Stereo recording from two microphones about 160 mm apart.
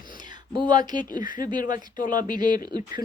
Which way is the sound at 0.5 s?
25° right (ahead or behind).